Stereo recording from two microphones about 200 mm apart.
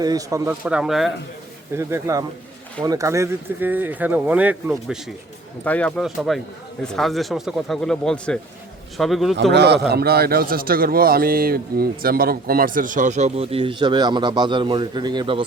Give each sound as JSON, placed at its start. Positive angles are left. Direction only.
{"t": 0.0, "sound": "speech", "side_deg": -20}
{"t": 0.6, "sound": "speech", "side_deg": -5}
{"t": 1.7, "sound": "speech", "side_deg": -15}
{"t": 5.6, "sound": "speech", "side_deg": 5}
{"t": 9.5, "sound": "a man's voice", "side_deg": -55}